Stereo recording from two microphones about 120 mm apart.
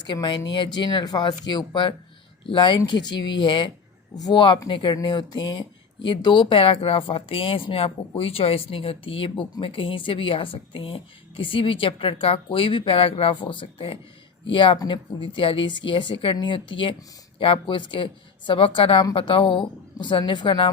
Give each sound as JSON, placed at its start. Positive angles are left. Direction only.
{"t": 0.1, "sound": "speech", "side_deg": 40}